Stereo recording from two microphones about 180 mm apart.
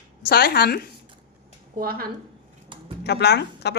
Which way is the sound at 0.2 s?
60° left (ahead or behind).